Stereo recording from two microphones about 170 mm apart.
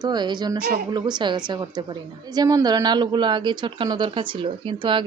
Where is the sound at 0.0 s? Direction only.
25° right (ahead or behind).